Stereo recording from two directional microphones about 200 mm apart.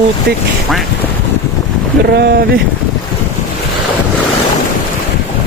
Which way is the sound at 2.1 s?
55° right (ahead or behind).